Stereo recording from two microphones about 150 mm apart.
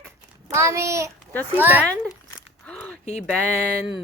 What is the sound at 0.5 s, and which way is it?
A child's voice, 20° right (ahead or behind).